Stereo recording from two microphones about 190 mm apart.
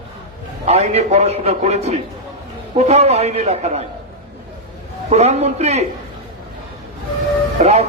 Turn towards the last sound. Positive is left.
turn(degrees=-35)  # may be behind; listen again after turning